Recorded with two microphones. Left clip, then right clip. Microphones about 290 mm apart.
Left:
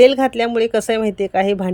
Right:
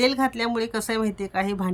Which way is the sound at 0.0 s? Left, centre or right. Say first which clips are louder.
Left 10 dB; centre.